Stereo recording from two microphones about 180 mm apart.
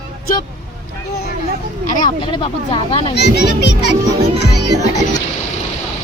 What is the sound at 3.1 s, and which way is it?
Speech, 70° left (ahead or behind).